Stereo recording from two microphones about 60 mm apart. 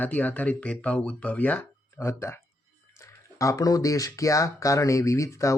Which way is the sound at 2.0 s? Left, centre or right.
Left.